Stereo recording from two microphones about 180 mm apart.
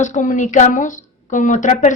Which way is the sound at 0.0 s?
45° left (ahead or behind).